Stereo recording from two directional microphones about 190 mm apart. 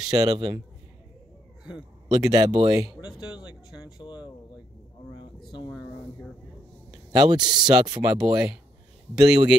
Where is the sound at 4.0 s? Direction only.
20° left (ahead or behind).